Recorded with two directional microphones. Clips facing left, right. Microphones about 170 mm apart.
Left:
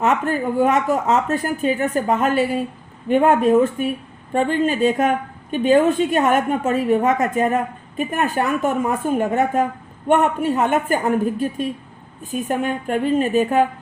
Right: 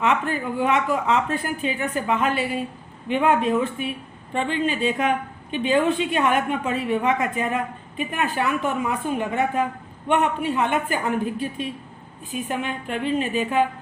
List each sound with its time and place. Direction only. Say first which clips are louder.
0.0 s speech: left 4 dB; 45° left (ahead or behind)